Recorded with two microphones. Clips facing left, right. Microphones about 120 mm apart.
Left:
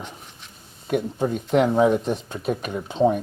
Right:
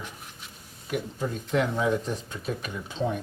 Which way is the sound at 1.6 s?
45° left (ahead or behind).